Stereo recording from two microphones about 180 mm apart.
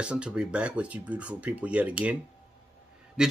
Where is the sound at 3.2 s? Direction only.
5° right (ahead or behind).